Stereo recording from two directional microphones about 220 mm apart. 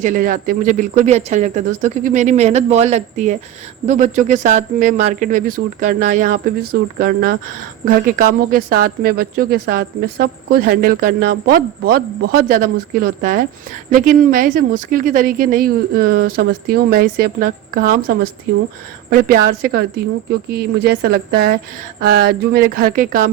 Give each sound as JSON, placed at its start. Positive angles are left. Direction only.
{"t": 0.0, "sound": "speech", "side_deg": -35}